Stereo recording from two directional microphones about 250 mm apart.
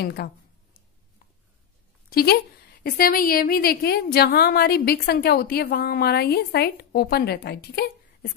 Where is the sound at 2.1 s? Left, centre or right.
Left.